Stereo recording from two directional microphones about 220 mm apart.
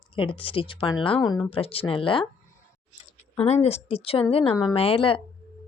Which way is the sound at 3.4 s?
30° left (ahead or behind).